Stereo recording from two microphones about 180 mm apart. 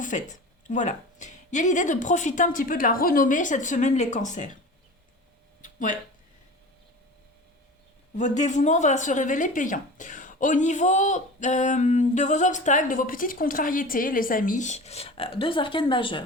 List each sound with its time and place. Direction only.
0.0 s speech: 45° left (ahead or behind)
5.6 s a sound: 45° left (ahead or behind)
8.1 s speech: 40° left (ahead or behind)